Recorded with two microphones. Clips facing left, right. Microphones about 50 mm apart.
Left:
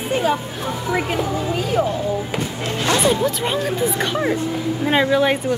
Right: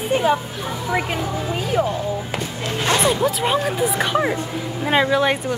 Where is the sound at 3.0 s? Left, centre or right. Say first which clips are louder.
Even; centre.